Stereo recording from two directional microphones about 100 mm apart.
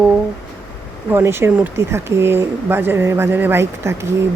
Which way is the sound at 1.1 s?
25° right (ahead or behind).